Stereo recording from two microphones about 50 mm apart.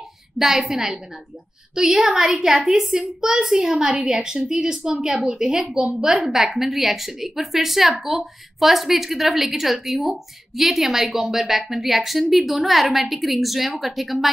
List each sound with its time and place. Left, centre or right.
0.4 s a woman's voice: centre